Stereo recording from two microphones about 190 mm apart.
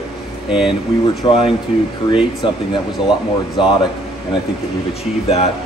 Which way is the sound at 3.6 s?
25° left (ahead or behind).